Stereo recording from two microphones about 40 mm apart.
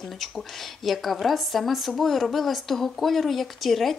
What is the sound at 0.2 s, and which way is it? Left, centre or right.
A woman's voice, centre.